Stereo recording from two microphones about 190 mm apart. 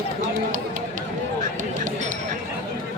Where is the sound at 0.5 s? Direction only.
45° right (ahead or behind).